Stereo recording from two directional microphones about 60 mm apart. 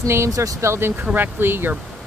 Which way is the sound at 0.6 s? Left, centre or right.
Right.